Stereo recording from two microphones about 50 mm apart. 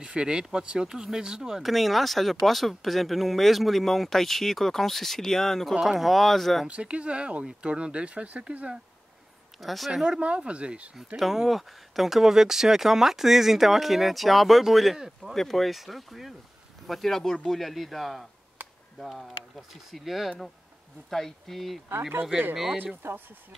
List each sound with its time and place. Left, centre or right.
0.0 s speech: centre
1.6 s speech: centre
5.8 s speech: centre
6.7 s speech: right
9.6 s speech: centre
10.0 s speech: centre
11.1 s speech: centre
15.3 s speech: centre
23.0 s speech: right